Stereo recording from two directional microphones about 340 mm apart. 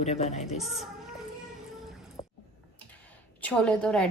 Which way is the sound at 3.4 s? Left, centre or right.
Centre.